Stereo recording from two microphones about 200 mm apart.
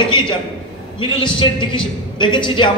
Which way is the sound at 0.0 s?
25° left (ahead or behind).